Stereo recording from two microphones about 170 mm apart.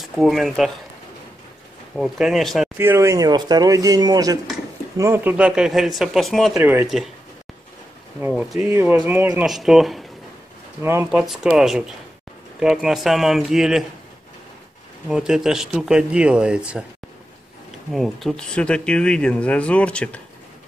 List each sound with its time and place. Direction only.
0.0 s speech: centre (ahead or behind)
2.0 s speech: centre (ahead or behind)
2.8 s speech: 15° right (ahead or behind); by 6.6 s centre (ahead or behind)
6.6 s speech: 10° right (ahead or behind)
8.3 s speech: 5° right (ahead or behind)
10.8 s speech: 15° right (ahead or behind)
11.1 s speech: centre (ahead or behind)
15.0 s speech: 5° right (ahead or behind)
17.9 s speech: centre (ahead or behind)